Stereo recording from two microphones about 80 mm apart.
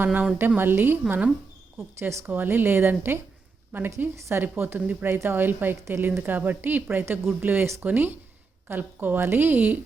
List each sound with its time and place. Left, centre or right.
0.0 s a woman's voice: right
1.0 s speech: centre
2.0 s a woman's voice: right